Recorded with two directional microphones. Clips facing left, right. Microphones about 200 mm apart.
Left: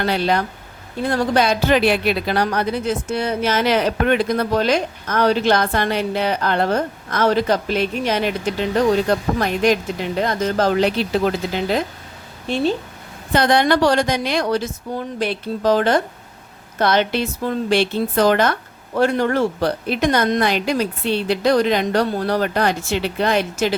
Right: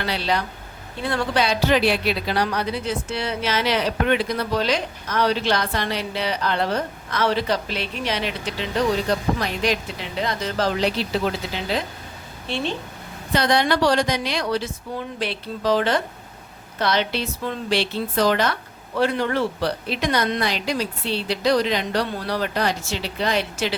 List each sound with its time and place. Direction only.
0.0 s speech: 50° left (ahead or behind)
13.3 s speech: 50° left (ahead or behind)